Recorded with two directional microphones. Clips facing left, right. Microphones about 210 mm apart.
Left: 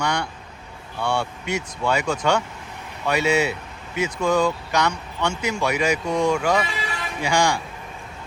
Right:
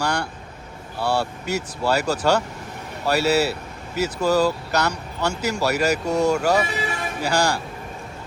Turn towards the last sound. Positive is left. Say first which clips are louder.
# even
turn(degrees=-5)  # may be behind; listen again after turning